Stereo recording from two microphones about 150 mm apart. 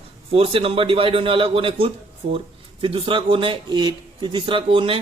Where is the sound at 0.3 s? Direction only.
40° right (ahead or behind).